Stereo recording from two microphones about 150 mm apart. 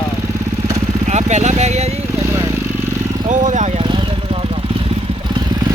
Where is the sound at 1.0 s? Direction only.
50° right (ahead or behind).